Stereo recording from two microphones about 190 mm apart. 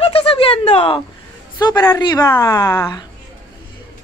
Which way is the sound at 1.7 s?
15° left (ahead or behind).